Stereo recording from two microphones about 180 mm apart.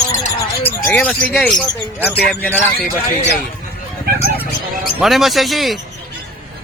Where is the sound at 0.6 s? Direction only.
10° left (ahead or behind).